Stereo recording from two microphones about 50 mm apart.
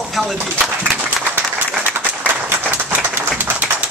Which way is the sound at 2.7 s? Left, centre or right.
Right.